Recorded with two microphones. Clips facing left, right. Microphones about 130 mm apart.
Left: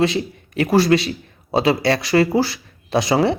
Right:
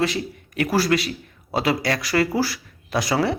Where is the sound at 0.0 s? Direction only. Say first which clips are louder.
Left 5 dB; 25° left (ahead or behind).